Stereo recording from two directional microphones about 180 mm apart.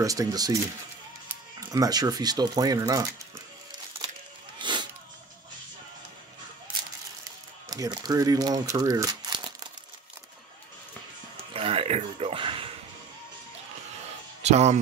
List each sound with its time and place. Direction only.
0.0 s speech: 20° right (ahead or behind)
1.6 s speech: 20° right (ahead or behind)
4.6 s a sound: 25° right (ahead or behind)
7.7 s speech: 20° right (ahead or behind)
11.5 s a sound: 30° right (ahead or behind)
14.4 s speech: 40° right (ahead or behind)